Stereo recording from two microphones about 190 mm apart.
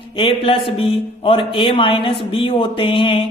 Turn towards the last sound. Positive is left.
turn(degrees=25)  # may be behind; listen again after turning